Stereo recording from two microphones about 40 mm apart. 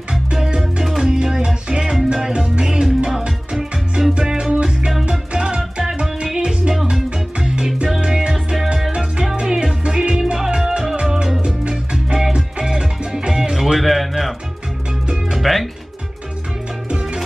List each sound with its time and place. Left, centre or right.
0.1 s music: centre
8.9 s music: right
13.7 s music: centre
15.3 s music: centre